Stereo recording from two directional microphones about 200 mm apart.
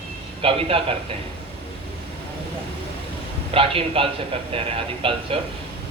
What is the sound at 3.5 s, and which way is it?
Speech, 30° right (ahead or behind).